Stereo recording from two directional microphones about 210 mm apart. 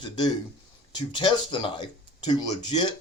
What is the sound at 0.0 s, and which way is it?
Speech, 20° left (ahead or behind).